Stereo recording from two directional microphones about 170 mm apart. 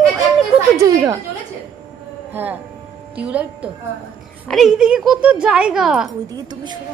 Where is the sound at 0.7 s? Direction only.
20° right (ahead or behind).